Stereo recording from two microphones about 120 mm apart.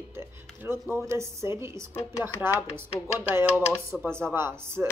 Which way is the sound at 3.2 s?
15° right (ahead or behind).